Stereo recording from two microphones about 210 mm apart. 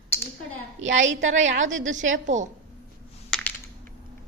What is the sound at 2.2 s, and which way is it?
Speech, 35° right (ahead or behind).